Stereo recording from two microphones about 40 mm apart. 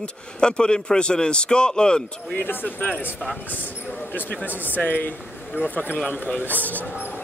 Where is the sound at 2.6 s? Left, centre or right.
Left.